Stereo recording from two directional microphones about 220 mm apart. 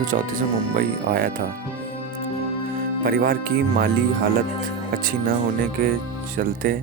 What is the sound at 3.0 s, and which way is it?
Speech, 40° right (ahead or behind).